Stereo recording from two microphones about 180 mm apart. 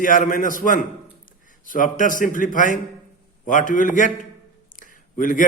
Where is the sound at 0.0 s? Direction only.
50° left (ahead or behind).